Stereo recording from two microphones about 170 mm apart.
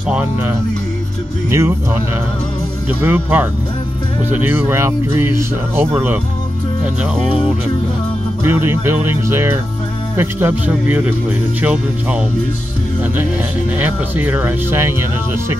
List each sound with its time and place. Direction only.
0.1 s speech: 10° right (ahead or behind)
3.0 s speech: 10° right (ahead or behind)
8.5 s speech: 15° right (ahead or behind)
13.7 s speech: 10° right (ahead or behind)